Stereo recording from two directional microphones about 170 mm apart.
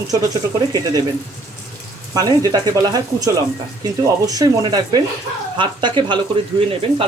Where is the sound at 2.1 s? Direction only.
20° right (ahead or behind).